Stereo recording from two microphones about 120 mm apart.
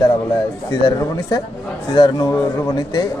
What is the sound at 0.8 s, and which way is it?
Speech, 35° left (ahead or behind).